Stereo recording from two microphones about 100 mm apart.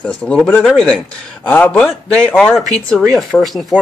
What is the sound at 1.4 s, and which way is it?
Speech, 15° left (ahead or behind).